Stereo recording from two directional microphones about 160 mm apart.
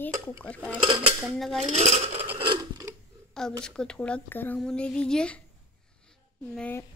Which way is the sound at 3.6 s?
5° left (ahead or behind).